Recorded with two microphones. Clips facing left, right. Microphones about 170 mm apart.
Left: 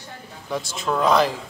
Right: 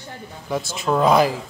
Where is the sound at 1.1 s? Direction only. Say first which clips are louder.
Right 2 dB; 10° right (ahead or behind).